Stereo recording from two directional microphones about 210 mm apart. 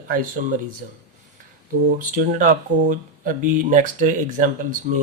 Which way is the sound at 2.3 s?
35° right (ahead or behind).